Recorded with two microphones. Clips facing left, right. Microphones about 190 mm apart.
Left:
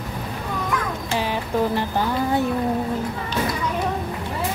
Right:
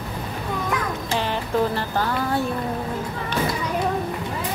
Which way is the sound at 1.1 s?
10° left (ahead or behind).